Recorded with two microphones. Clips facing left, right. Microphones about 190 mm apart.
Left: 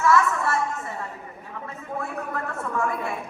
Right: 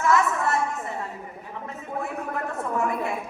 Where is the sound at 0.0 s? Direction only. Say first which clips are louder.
Left 1 dB; 20° right (ahead or behind).